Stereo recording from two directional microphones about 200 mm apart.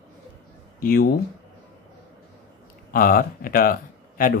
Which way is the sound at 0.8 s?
45° left (ahead or behind).